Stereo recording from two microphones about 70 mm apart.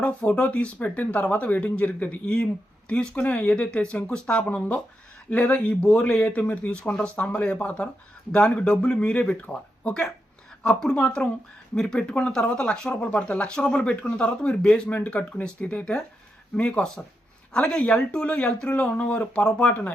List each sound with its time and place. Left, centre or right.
0.0 s speech: centre